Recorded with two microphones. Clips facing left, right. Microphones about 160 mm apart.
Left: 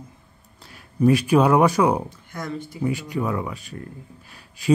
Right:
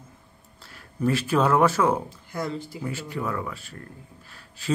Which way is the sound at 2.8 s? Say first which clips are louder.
Left 8 dB; 15° left (ahead or behind).